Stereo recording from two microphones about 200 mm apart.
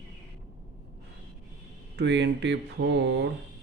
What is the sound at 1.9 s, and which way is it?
Speech, 60° right (ahead or behind).